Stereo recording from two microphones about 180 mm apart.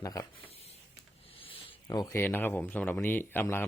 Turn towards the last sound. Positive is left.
turn(degrees=10)  # may be behind; listen again after turning